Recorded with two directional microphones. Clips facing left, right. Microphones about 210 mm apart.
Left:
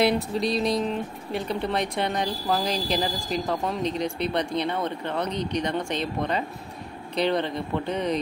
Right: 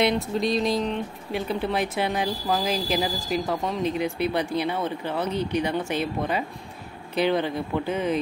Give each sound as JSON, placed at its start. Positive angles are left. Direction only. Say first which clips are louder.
{"t": 0.0, "sound": "speech", "louder": "even", "side_deg": 0}